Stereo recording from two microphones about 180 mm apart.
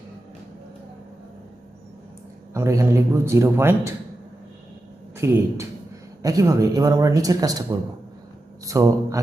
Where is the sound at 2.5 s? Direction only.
15° right (ahead or behind).